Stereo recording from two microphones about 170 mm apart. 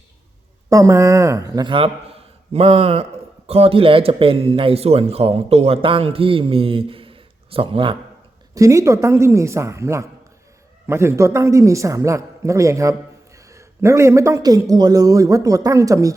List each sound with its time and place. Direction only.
0.7 s a man's voice: 20° right (ahead or behind)
8.5 s a man's voice: 20° right (ahead or behind)